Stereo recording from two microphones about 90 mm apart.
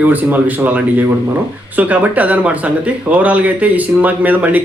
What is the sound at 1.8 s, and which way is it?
Speech, 15° right (ahead or behind).